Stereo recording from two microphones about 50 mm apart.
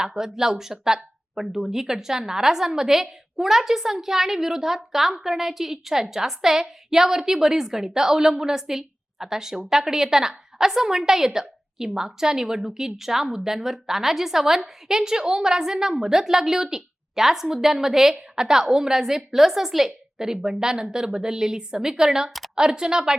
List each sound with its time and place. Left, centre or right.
0.0 s a woman's voice: centre